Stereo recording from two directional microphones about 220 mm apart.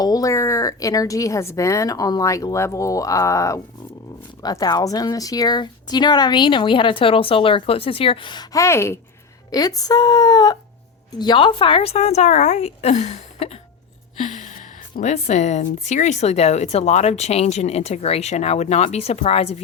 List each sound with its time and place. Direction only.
0.0 s a woman's voice: 15° left (ahead or behind)